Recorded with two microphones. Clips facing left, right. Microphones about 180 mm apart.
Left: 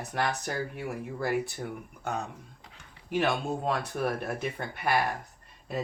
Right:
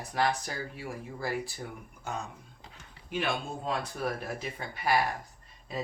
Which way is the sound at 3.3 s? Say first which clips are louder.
Left 4 dB; 65° left (ahead or behind).